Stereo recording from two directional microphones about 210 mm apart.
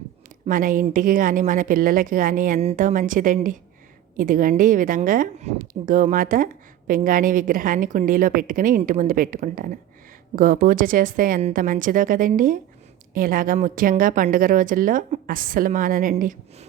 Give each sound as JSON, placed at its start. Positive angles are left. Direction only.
{"t": 0.4, "sound": "speech", "side_deg": -40}